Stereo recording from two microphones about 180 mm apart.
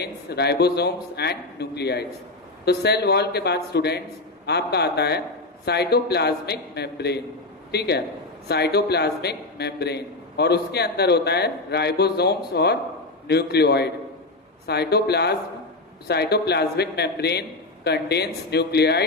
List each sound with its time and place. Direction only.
0.0 s a man's voice: 65° left (ahead or behind)